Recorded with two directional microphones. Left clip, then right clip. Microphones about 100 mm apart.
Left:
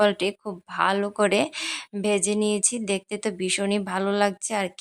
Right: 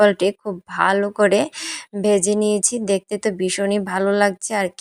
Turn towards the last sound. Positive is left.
turn(degrees=-30)  # may be behind; listen again after turning